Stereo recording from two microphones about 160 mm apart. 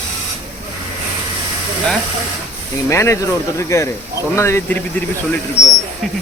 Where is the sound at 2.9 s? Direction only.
20° left (ahead or behind).